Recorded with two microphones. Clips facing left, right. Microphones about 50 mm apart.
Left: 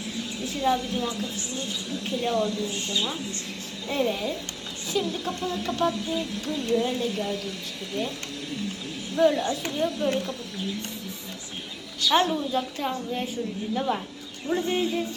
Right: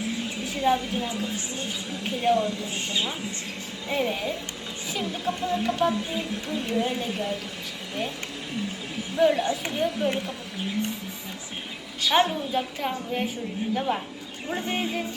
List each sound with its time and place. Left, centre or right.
0.4 s a woman's voice: right
9.1 s a woman's voice: right
12.0 s a woman's voice: right